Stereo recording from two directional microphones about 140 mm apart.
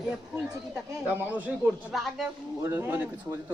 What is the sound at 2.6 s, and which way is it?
Speech, 20° right (ahead or behind).